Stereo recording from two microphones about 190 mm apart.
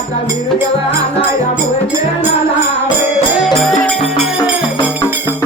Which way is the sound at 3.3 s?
Centre (ahead or behind).